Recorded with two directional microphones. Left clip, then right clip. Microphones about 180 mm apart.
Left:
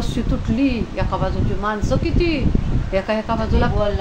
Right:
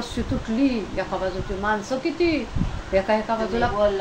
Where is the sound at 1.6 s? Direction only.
20° left (ahead or behind).